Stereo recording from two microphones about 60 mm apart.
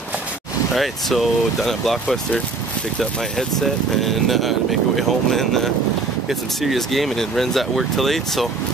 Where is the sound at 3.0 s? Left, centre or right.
Centre.